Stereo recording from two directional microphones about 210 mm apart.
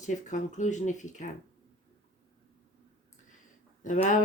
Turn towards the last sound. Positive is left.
turn(degrees=35)  # may be behind; listen again after turning